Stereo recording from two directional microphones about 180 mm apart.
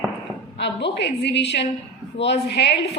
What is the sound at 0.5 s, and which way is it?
Speech, 70° left (ahead or behind).